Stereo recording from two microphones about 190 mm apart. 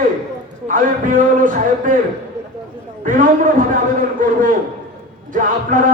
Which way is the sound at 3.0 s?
45° right (ahead or behind).